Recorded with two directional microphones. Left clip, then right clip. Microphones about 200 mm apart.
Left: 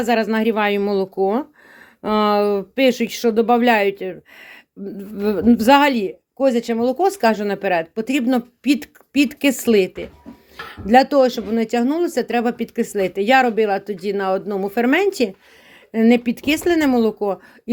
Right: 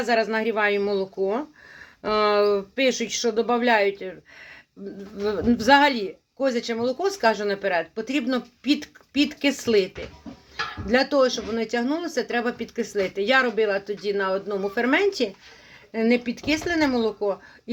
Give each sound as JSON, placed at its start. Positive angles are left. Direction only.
{"t": 0.0, "sound": "speech", "side_deg": 45}